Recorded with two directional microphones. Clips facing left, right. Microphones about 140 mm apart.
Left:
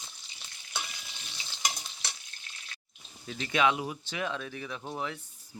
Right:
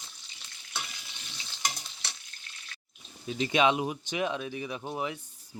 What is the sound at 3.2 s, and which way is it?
Speech, 20° right (ahead or behind).